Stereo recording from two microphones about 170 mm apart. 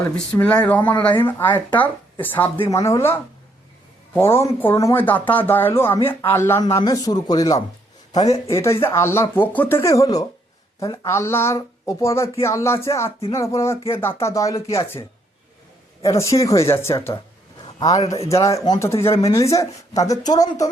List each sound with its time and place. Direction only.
0.3 s speech: 10° left (ahead or behind)
16.1 s speech: 20° left (ahead or behind)